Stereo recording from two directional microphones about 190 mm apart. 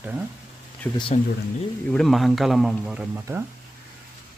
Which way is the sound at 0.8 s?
15° left (ahead or behind).